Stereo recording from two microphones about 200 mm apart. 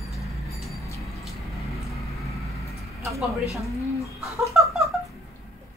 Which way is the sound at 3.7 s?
15° left (ahead or behind).